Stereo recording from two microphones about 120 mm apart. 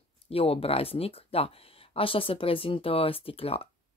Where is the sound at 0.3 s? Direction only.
50° left (ahead or behind).